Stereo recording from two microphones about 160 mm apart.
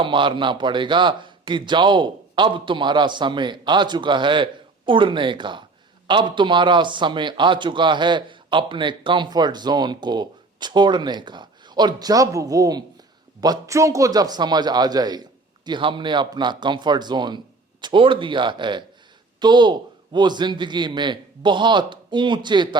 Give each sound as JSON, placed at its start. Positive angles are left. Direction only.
{"t": 0.0, "sound": "a man's voice", "side_deg": -30}